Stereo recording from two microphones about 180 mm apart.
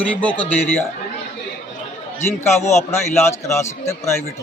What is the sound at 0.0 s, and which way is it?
Speech, 10° left (ahead or behind).